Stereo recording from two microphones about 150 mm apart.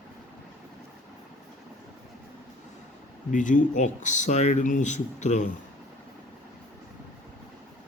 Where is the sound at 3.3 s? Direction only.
60° left (ahead or behind).